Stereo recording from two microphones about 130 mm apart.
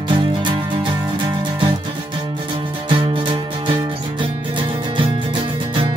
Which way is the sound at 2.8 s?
45° right (ahead or behind).